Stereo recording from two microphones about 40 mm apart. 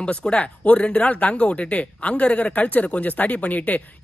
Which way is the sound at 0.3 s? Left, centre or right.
Left.